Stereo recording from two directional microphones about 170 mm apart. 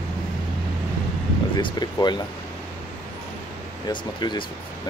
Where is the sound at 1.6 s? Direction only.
25° left (ahead or behind).